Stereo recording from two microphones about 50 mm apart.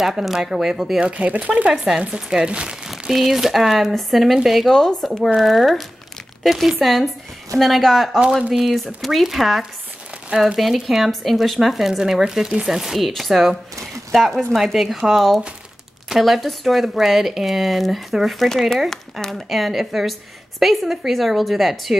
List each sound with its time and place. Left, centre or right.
0.0 s speech: centre
1.0 s speech: right
1.7 s speech: centre
2.9 s a woman's voice: centre
18.5 s a woman's voice: centre